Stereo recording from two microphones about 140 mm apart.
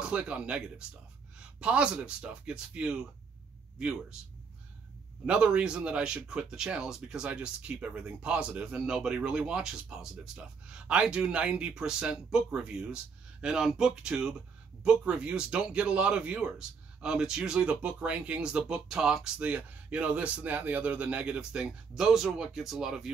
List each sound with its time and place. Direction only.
0.0 s speech: 5° right (ahead or behind)
5.2 s speech: 10° right (ahead or behind)